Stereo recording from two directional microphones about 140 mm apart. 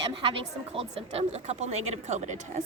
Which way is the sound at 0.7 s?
45° right (ahead or behind).